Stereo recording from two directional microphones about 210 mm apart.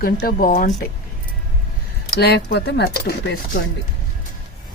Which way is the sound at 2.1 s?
50° left (ahead or behind).